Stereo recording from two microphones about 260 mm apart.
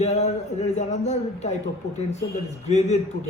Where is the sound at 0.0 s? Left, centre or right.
Left.